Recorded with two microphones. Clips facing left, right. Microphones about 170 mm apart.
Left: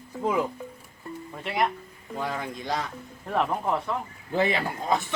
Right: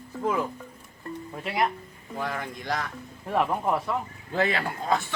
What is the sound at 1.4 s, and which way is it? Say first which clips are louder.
Speech: even; 5° right (ahead or behind).